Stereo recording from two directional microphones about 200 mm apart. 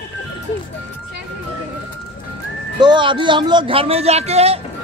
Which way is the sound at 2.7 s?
25° right (ahead or behind).